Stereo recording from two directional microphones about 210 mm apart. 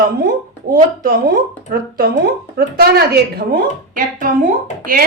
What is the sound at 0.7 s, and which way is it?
A woman's voice, 40° right (ahead or behind).